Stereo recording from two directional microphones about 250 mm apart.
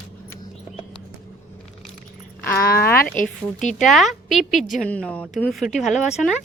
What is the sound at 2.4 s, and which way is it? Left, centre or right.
Speech, centre.